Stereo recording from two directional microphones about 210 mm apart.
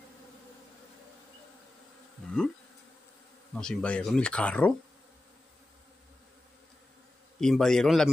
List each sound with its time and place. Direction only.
2.2 s bee: 5° left (ahead or behind)
3.5 s speech: 5° left (ahead or behind)
7.3 s speech: centre (ahead or behind)